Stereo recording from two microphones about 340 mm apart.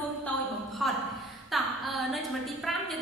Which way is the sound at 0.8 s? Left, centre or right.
Centre.